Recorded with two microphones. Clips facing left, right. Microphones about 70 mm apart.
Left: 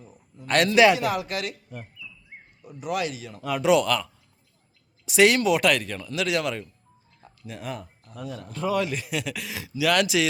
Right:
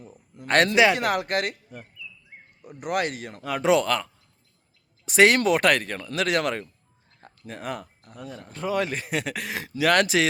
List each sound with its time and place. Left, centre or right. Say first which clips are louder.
0.4 s a man's voice: right 1 dB; right
0.9 s speech: right 2 dB; right
2.0 s a sound: right 1 dB; centre
2.6 s speech: right 2 dB; right
3.4 s a man's voice: left 1 dB; right
7.2 s a sound: right 1 dB; right
8.2 s a man's voice: left 2 dB; right